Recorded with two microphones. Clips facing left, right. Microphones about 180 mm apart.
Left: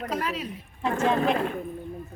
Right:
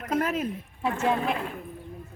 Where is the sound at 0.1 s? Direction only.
50° right (ahead or behind).